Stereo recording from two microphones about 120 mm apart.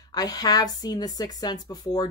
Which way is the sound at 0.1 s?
30° left (ahead or behind).